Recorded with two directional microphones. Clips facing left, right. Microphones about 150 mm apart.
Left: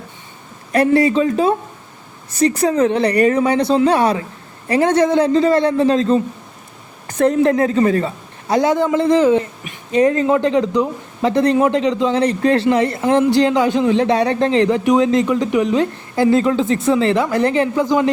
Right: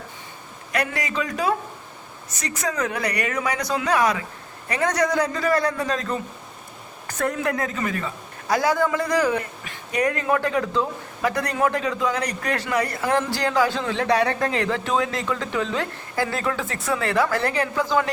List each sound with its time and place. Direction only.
0.7 s a woman's voice: 30° left (ahead or behind)
2.6 s a woman's voice: 30° left (ahead or behind)